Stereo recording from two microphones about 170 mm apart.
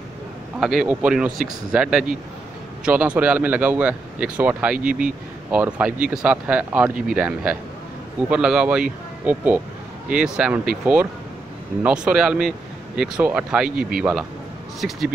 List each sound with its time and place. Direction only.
0.6 s speech: 5° right (ahead or behind)